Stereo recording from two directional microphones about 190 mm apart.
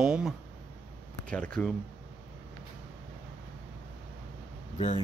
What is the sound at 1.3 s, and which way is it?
Speech, 5° left (ahead or behind).